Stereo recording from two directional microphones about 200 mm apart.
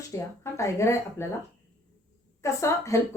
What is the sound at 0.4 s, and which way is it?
Speech, 15° left (ahead or behind).